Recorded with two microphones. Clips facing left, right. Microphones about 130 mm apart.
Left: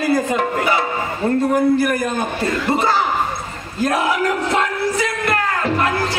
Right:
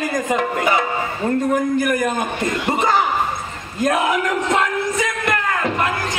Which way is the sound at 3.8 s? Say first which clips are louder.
Even; 35° left (ahead or behind).